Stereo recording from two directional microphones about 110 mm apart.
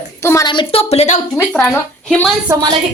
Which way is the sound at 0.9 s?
70° left (ahead or behind).